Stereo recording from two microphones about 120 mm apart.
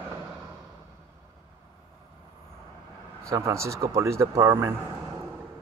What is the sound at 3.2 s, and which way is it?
Speech, 25° right (ahead or behind).